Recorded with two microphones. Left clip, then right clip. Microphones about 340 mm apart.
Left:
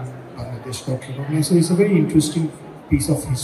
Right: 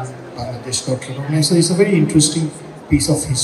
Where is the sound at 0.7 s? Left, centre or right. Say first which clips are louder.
Right 6 dB; right.